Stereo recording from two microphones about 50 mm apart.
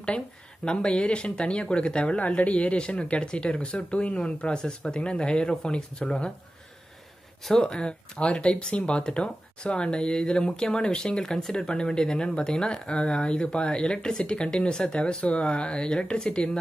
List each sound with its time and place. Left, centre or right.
0.7 s speech: centre
7.6 s speech: centre